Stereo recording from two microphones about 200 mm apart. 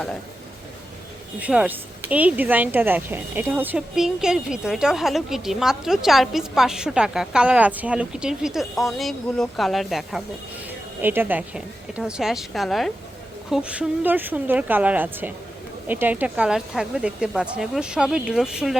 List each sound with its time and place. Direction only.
1.4 s speech: 5° right (ahead or behind)